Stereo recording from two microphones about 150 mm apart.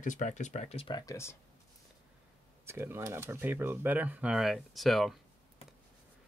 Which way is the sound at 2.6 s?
15° right (ahead or behind).